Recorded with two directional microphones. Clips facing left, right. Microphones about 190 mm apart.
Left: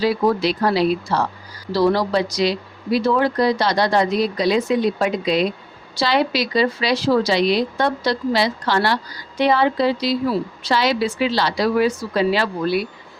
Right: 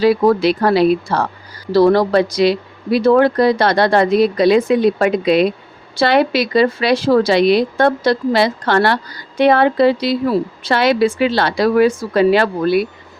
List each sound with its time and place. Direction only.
0.0 s a woman's voice: 60° right (ahead or behind)